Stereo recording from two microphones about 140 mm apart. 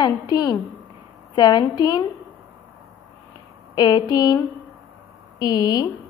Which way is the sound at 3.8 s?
30° left (ahead or behind).